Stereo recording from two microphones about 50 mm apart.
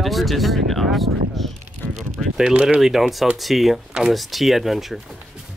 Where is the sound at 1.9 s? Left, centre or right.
Centre.